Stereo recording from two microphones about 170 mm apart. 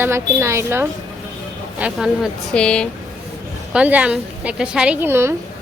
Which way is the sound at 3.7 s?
10° right (ahead or behind).